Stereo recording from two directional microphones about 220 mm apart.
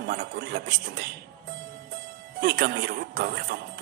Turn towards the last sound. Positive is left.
turn(degrees=-45)  # may be behind; listen again after turning